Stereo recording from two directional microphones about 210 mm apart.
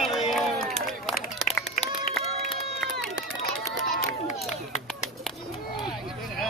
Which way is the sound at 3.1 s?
65° right (ahead or behind).